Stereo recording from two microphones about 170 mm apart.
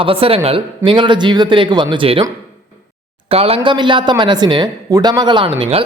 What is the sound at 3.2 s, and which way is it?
A man's voice, 35° right (ahead or behind).